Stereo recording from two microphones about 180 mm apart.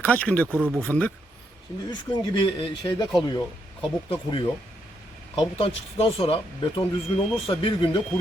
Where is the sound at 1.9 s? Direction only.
25° left (ahead or behind).